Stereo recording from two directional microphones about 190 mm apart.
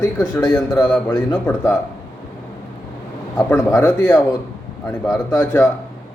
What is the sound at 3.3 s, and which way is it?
Speech, 10° left (ahead or behind).